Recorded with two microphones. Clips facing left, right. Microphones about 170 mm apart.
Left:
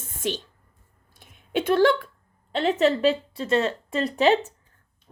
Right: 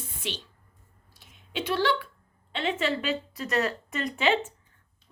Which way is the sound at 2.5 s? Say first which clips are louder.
Left 7 dB; 40° left (ahead or behind).